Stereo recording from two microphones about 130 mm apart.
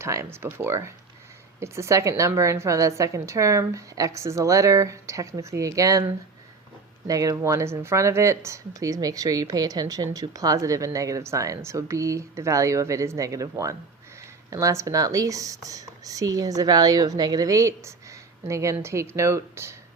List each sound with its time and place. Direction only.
0.0 s speech: 20° right (ahead or behind)
7.1 s speech: 25° right (ahead or behind)